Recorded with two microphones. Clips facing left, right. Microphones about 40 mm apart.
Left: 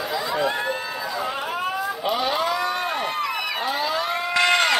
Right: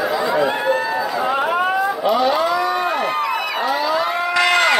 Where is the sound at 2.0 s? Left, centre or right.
Centre.